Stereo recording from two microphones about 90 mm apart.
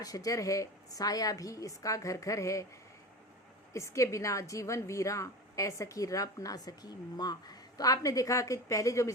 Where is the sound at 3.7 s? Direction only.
35° left (ahead or behind).